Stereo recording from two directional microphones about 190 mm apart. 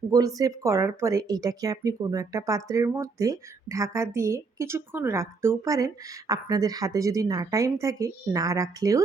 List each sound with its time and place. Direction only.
0.1 s speech: 20° right (ahead or behind)